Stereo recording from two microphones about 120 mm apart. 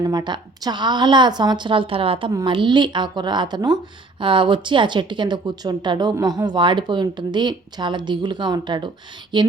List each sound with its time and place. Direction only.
0.0 s speech: 35° right (ahead or behind)